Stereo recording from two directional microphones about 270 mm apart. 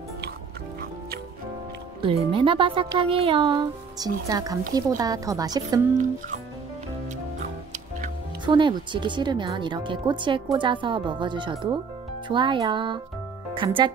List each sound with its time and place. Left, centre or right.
2.0 s speech: centre
8.5 s speech: centre